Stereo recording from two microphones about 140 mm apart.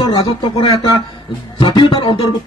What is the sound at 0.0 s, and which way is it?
A man's voice, 35° left (ahead or behind).